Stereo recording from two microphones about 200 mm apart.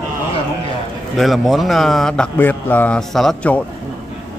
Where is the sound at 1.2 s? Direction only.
Centre (ahead or behind).